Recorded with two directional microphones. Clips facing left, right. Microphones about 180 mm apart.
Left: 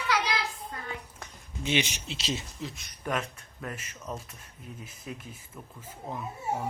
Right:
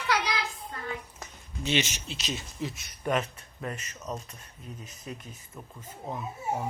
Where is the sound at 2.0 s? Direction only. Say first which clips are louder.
Left 2 dB; 25° left (ahead or behind).